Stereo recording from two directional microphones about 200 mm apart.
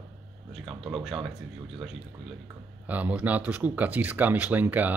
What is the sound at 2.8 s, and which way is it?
Speech, 5° right (ahead or behind).